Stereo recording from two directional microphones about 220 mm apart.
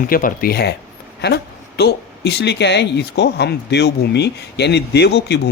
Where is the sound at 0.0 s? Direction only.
40° left (ahead or behind).